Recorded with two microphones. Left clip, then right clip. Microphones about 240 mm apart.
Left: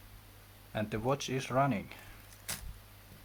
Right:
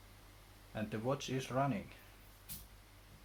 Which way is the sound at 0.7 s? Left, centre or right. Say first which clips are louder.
Left 6 dB; left.